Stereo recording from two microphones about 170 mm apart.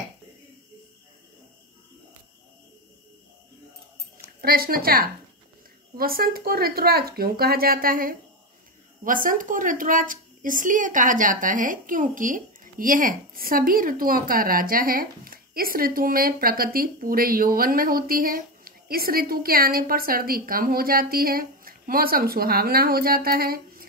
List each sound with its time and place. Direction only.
4.4 s speech: 60° right (ahead or behind)